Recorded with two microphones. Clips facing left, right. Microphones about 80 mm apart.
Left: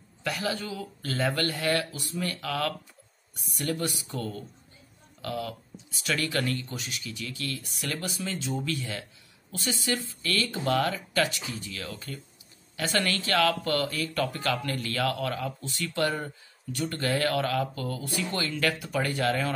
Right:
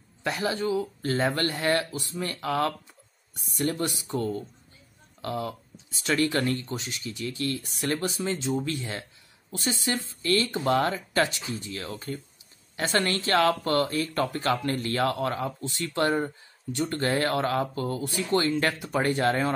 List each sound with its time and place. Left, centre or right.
0.2 s speech: right